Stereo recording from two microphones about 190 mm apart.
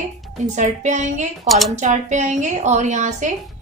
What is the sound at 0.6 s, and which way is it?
Speech, 40° right (ahead or behind).